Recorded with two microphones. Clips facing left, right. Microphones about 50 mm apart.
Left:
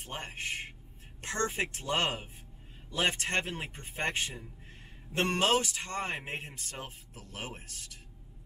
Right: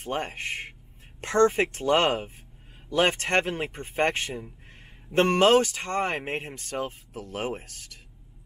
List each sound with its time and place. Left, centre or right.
0.0 s speech: right